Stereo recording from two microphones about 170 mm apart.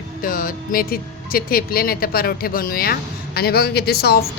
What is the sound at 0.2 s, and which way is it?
Speech, 55° left (ahead or behind).